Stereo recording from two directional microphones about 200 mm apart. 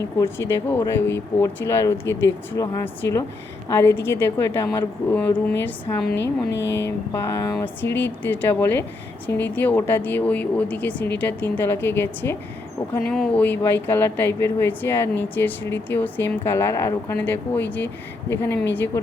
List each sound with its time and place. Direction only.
0.2 s speech: 15° left (ahead or behind)
6.1 s a sound: 60° left (ahead or behind)
6.8 s speech: 15° left (ahead or behind)